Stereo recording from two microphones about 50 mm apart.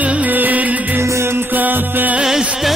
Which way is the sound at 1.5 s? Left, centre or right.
Right.